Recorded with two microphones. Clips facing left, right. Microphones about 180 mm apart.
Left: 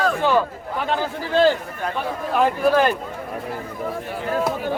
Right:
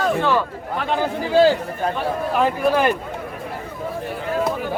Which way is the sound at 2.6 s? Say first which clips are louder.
Left 2 dB; centre (ahead or behind).